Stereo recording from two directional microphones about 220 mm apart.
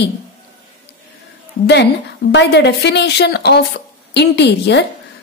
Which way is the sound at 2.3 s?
50° left (ahead or behind).